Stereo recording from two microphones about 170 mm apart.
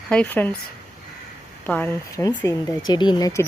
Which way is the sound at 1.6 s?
10° left (ahead or behind).